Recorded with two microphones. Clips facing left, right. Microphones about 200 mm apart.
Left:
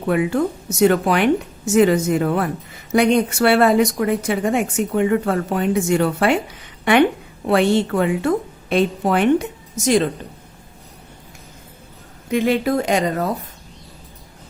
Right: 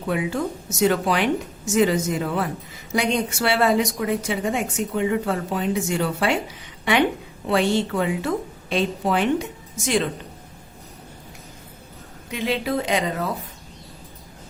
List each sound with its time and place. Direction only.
0.1 s speech: 60° left (ahead or behind)
7.4 s speech: 55° left (ahead or behind)
9.7 s a woman's voice: 40° left (ahead or behind)
12.3 s speech: 50° left (ahead or behind)